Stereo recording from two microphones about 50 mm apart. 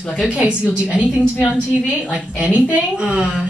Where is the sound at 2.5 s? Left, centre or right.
Right.